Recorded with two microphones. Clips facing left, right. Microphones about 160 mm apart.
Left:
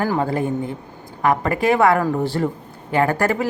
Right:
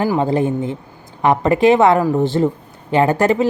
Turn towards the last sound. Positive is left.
turn(degrees=-20)  # may be behind; listen again after turning